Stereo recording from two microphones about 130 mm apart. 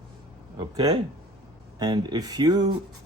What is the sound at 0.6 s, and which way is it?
Speech, 30° right (ahead or behind).